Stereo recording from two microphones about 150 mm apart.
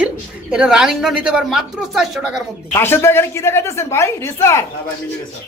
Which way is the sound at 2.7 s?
15° left (ahead or behind).